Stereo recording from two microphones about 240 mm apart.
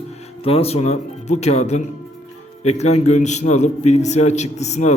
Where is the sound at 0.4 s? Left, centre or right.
Left.